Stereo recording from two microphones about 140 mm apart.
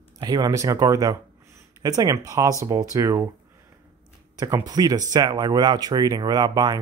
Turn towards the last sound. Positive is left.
turn(degrees=-30)  # may be behind; listen again after turning